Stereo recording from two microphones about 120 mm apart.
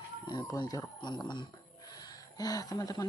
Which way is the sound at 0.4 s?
30° left (ahead or behind).